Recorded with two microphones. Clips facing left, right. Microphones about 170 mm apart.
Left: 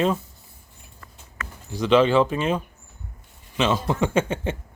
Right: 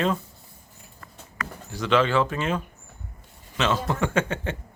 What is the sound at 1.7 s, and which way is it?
Speech, 15° left (ahead or behind).